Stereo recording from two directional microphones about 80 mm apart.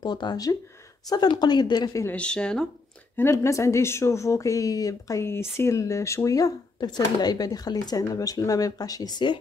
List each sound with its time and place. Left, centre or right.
0.0 s speech: left
2.1 s speech: centre
3.2 s speech: left